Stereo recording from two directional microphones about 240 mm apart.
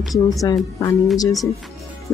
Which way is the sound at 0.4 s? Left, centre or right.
Centre.